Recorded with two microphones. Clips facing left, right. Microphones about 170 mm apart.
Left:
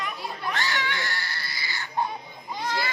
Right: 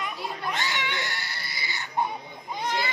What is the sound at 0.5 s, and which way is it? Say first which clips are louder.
Crying: left 1 dB; 20° right (ahead or behind).